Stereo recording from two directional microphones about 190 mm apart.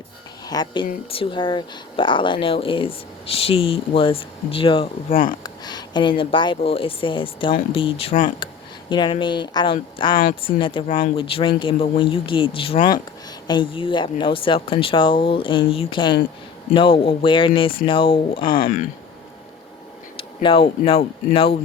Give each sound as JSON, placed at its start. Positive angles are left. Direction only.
{"t": 0.4, "sound": "speech", "side_deg": 20}
{"t": 8.4, "sound": "a sound", "side_deg": 25}
{"t": 8.9, "sound": "speech", "side_deg": 25}
{"t": 18.5, "sound": "speech", "side_deg": 45}
{"t": 20.1, "sound": "speech", "side_deg": 30}